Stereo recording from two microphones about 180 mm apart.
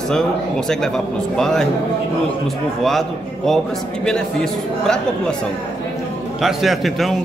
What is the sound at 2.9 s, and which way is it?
Speech, centre (ahead or behind).